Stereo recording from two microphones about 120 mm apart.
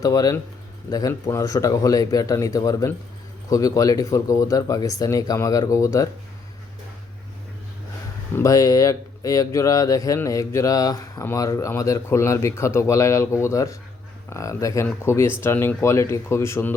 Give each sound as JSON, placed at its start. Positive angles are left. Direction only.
{"t": 0.0, "sound": "speech", "side_deg": 30}
{"t": 8.4, "sound": "speech", "side_deg": 30}